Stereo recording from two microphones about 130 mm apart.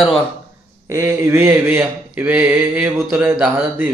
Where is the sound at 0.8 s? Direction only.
25° right (ahead or behind).